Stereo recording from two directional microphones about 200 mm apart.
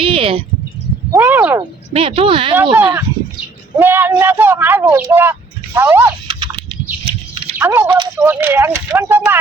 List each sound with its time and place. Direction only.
0.0 s a sound: 25° right (ahead or behind)
1.1 s speech: 10° right (ahead or behind)
1.9 s speech: 25° right (ahead or behind)
2.7 s speech: 15° right (ahead or behind)
6.2 s a sound: 25° right (ahead or behind)
7.6 s speech: 15° right (ahead or behind)